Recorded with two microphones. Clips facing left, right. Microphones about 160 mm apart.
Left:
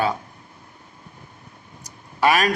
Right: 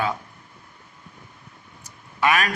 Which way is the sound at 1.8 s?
35° left (ahead or behind).